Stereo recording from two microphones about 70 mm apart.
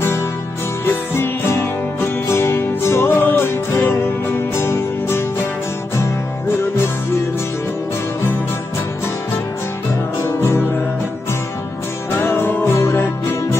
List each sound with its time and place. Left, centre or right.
0.8 s music: left
10.2 s music: left
12.1 s music: left